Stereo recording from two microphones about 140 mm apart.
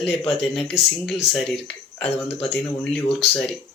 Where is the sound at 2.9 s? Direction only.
Centre (ahead or behind).